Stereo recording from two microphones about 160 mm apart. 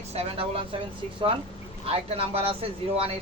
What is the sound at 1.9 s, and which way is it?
Speech, 35° right (ahead or behind).